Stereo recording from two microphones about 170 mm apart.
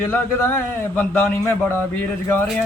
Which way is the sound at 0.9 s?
15° left (ahead or behind).